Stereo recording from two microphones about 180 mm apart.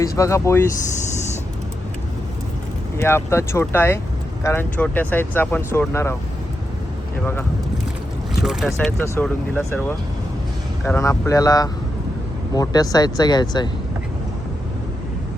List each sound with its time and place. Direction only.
0.0 s speech: 15° left (ahead or behind)
3.0 s speech: 15° left (ahead or behind)
8.4 s speech: centre (ahead or behind)
10.8 s speech: 15° left (ahead or behind)